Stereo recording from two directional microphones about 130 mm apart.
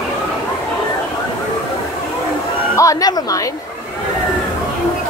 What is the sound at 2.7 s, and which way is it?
Speech, 25° left (ahead or behind).